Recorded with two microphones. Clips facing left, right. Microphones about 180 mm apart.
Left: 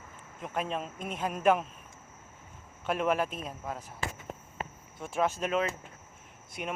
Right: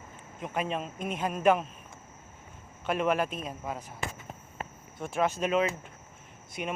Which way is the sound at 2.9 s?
Centre (ahead or behind).